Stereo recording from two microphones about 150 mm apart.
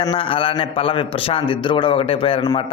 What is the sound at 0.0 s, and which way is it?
A man's voice, 35° left (ahead or behind).